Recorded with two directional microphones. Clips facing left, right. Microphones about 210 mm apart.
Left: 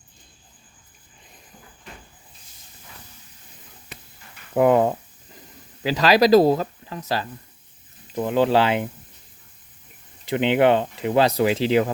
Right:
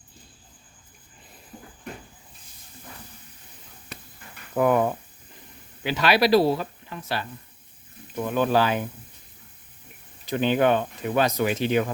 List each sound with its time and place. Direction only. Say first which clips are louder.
4.5 s a sound: left 4 dB; 25° left (ahead or behind)
5.8 s speech: left 4 dB; 35° left (ahead or behind)
8.1 s speech: left 3 dB; 25° left (ahead or behind)
10.2 s speech: left 3 dB; 20° left (ahead or behind)